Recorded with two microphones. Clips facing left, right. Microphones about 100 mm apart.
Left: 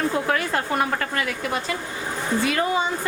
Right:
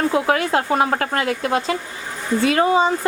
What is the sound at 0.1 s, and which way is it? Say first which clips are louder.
Speech: right 5 dB; 75° right (ahead or behind).